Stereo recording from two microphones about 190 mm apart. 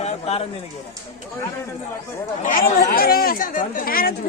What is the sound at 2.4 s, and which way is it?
Speech, 45° left (ahead or behind).